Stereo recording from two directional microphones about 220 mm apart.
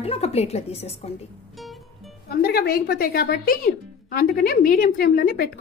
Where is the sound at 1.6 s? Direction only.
Centre (ahead or behind).